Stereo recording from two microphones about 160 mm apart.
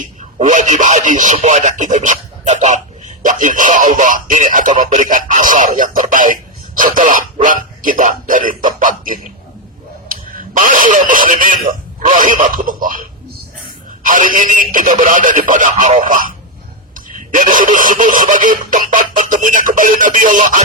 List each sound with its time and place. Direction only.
0.2 s speech: 50° right (ahead or behind)
14.0 s speech: 55° right (ahead or behind)